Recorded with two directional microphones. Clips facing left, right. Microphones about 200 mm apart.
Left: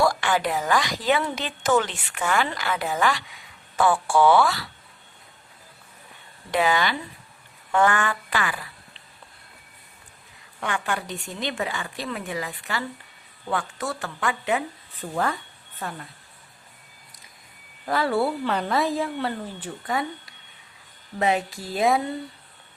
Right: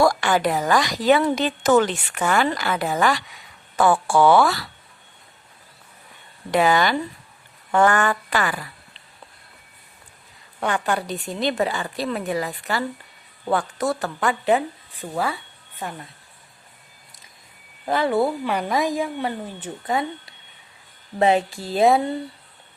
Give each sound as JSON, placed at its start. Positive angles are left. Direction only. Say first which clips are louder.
{"t": 0.0, "sound": "speech", "louder": "right 4 dB", "side_deg": -45}
{"t": 6.5, "sound": "speech", "louder": "right 4 dB", "side_deg": -45}
{"t": 10.6, "sound": "a woman's voice", "louder": "right 5 dB", "side_deg": -35}
{"t": 15.1, "sound": "speech", "louder": "right 1 dB", "side_deg": -10}
{"t": 17.8, "sound": "a woman's voice", "louder": "right 3 dB", "side_deg": -20}
{"t": 21.2, "sound": "a woman's voice", "louder": "right 5 dB", "side_deg": -30}